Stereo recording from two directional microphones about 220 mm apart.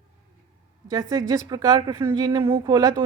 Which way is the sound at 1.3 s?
15° right (ahead or behind).